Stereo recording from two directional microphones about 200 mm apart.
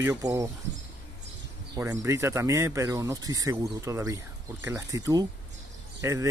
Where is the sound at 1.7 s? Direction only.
15° right (ahead or behind).